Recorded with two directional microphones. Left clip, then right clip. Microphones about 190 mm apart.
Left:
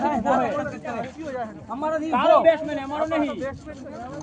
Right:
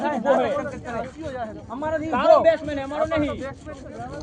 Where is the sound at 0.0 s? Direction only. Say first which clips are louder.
Right 1 dB; 20° right (ahead or behind).